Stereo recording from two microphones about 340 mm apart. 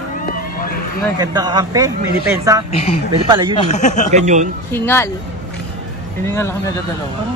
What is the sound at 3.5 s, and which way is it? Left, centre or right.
Speech, left.